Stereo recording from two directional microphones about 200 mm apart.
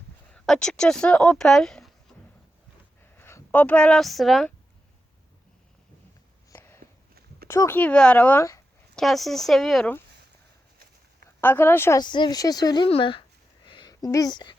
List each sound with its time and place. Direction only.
0.3 s speech: 5° left (ahead or behind)
3.2 s speech: 10° left (ahead or behind)
6.5 s a sound: 10° left (ahead or behind)
7.4 s speech: 10° left (ahead or behind)
9.0 s speech: centre (ahead or behind)
11.3 s a woman's voice: 10° left (ahead or behind)
13.7 s a sound: 20° left (ahead or behind)